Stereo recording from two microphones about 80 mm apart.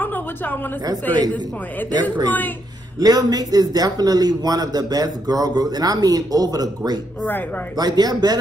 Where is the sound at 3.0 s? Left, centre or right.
Right.